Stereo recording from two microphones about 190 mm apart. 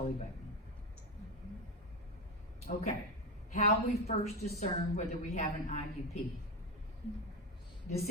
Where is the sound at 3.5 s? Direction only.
35° left (ahead or behind).